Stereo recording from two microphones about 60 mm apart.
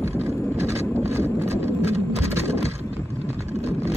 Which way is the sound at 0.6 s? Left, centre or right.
Right.